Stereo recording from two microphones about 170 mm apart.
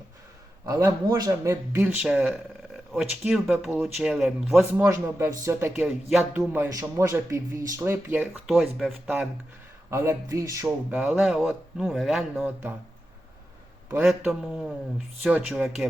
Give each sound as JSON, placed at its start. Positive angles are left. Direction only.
{"t": 0.6, "sound": "a man's voice", "side_deg": -20}
{"t": 1.8, "sound": "speech", "side_deg": 0}
{"t": 4.8, "sound": "speech", "side_deg": -15}
{"t": 5.8, "sound": "speech", "side_deg": 0}
{"t": 6.5, "sound": "speech", "side_deg": -15}
{"t": 8.3, "sound": "speech", "side_deg": 0}
{"t": 9.9, "sound": "speech", "side_deg": -15}
{"t": 11.0, "sound": "speech", "side_deg": 0}
{"t": 14.0, "sound": "speech", "side_deg": 0}